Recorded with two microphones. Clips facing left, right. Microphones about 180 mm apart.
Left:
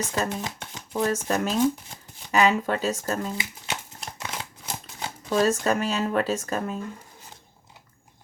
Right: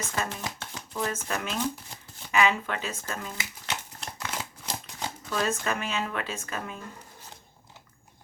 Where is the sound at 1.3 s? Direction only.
35° left (ahead or behind).